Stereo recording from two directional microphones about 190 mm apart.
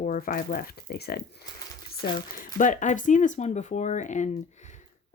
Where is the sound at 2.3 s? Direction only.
45° left (ahead or behind).